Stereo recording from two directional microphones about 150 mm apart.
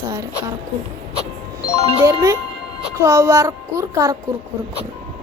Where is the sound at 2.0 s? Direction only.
20° right (ahead or behind).